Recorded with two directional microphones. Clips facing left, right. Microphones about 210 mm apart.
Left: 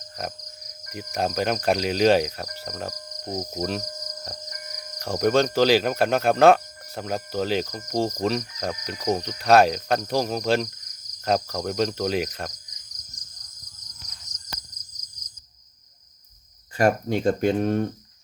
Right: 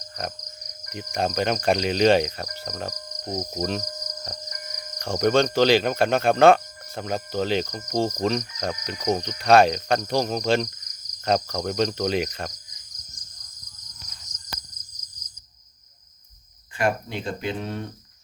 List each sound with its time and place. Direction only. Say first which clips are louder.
0.2 s speech: even; centre (ahead or behind)
16.7 s speech: left 4 dB; 45° left (ahead or behind)